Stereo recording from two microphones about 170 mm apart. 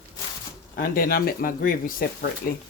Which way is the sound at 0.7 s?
60° left (ahead or behind).